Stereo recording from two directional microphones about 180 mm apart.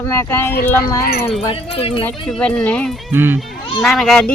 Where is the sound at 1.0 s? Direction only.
60° left (ahead or behind).